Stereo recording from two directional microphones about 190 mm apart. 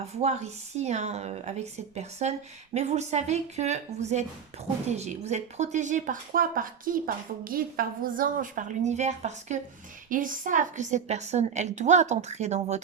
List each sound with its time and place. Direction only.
0.0 s speech: 35° right (ahead or behind)